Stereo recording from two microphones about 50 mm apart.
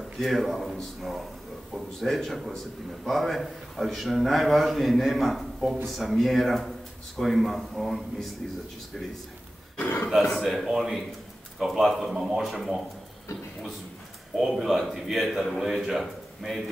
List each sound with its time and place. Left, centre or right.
0.2 s a man's voice: centre
10.0 s a man's voice: centre
14.5 s a man's voice: centre